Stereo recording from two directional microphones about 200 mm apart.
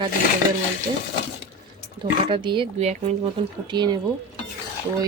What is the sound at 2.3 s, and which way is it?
Speech, 25° right (ahead or behind).